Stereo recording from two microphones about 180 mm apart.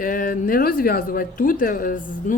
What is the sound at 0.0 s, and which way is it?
A woman's voice, 50° left (ahead or behind).